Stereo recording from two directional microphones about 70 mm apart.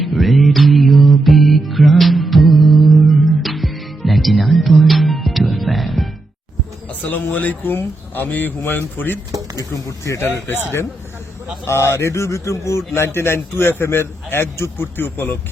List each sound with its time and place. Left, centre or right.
0.0 s music: centre
7.0 s speech: left
9.3 s a sound: right
9.7 s speech: left
10.2 s a man's voice: left
11.6 s a man's voice: left